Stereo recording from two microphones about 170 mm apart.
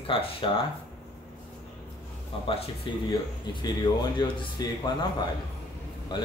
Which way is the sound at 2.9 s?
30° left (ahead or behind).